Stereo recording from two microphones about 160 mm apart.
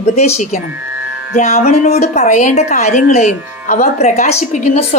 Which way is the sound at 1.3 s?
45° left (ahead or behind).